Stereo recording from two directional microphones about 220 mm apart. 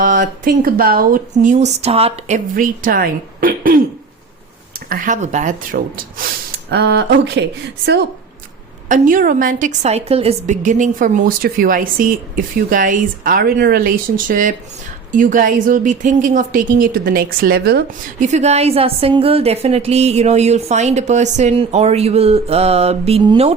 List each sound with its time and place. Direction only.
0.0 s speech: 35° right (ahead or behind)
4.9 s speech: 35° right (ahead or behind)
6.7 s speech: 50° right (ahead or behind)
8.9 s speech: 35° right (ahead or behind)
18.3 s a woman's voice: 30° right (ahead or behind)